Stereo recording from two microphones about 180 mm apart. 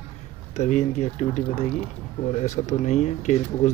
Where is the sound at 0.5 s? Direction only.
40° left (ahead or behind).